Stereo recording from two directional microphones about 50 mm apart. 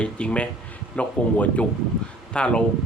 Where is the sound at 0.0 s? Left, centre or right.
Left.